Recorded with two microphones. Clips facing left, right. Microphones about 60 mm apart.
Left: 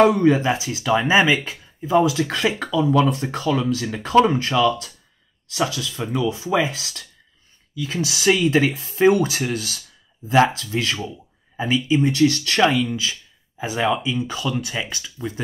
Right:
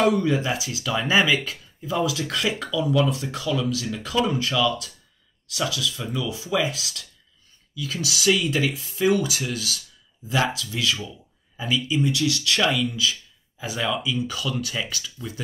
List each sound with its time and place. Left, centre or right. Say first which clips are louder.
0.0 s speech: left 6 dB; left